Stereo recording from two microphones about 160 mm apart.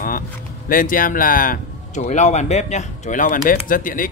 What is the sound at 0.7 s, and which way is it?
Speech, 60° left (ahead or behind).